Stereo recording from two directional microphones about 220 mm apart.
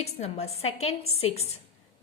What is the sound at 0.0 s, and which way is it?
A woman's voice, 30° left (ahead or behind).